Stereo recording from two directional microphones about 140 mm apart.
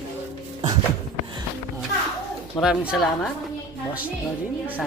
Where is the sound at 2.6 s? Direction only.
5° right (ahead or behind).